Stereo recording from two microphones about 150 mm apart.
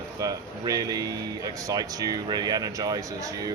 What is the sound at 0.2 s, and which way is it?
Speech, 25° right (ahead or behind).